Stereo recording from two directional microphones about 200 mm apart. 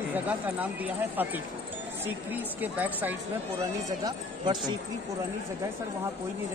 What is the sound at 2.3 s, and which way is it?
Speech, 10° right (ahead or behind).